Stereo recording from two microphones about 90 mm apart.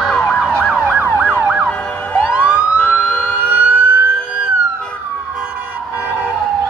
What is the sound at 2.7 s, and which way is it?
Emergency vehicle, 20° left (ahead or behind).